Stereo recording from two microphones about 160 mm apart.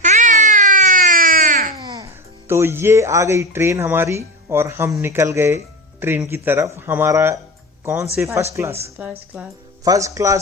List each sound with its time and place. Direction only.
0.0 s baby cry: 50° right (ahead or behind)
2.5 s speech: 15° right (ahead or behind)
9.8 s speech: 20° right (ahead or behind)